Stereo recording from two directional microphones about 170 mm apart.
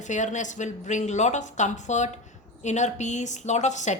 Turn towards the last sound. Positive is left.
turn(degrees=45)  # may be behind; listen again after turning